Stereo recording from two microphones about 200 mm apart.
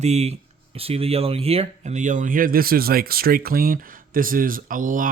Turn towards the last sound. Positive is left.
turn(degrees=-40)  # may be behind; listen again after turning